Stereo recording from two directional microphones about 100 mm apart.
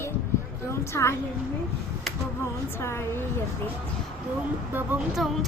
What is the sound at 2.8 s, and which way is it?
Speech, 25° left (ahead or behind).